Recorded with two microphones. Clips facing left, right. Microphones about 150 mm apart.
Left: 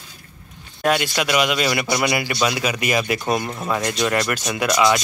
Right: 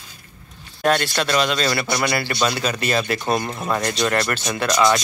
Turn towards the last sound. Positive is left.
turn(degrees=5)  # may be behind; listen again after turning